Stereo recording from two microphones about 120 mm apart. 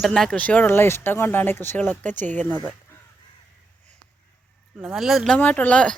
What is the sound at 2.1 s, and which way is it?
Speech, 90° right.